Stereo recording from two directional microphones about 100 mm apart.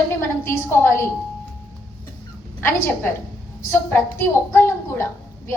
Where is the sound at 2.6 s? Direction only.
20° left (ahead or behind).